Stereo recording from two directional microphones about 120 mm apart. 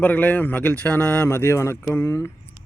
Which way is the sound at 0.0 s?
15° left (ahead or behind).